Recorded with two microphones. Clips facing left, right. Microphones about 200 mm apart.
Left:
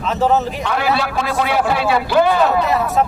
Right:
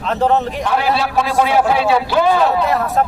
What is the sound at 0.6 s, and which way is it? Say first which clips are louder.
A man's voice: right 1 dB; 60° left (ahead or behind).